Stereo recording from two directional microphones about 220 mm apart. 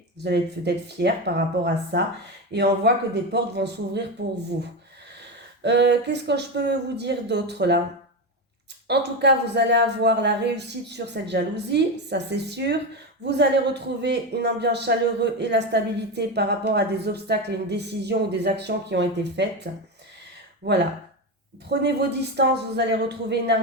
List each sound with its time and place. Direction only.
0.3 s a man's voice: 50° right (ahead or behind)
5.6 s a man's voice: 50° right (ahead or behind)
8.9 s a man's voice: 50° right (ahead or behind)